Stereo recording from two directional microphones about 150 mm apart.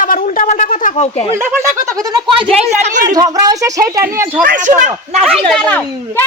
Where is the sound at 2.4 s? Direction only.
Centre (ahead or behind).